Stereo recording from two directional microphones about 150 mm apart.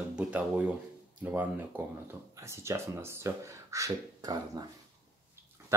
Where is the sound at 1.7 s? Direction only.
15° right (ahead or behind).